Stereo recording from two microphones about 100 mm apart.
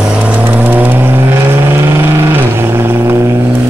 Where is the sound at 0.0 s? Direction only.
10° right (ahead or behind).